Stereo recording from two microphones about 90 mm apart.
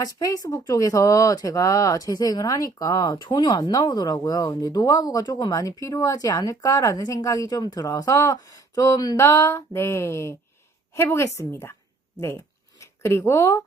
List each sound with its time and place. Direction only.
0.0 s a woman's voice: 40° left (ahead or behind)
12.8 s speech: 30° left (ahead or behind)